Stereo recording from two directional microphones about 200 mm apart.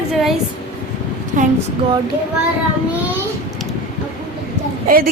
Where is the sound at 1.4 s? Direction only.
40° right (ahead or behind).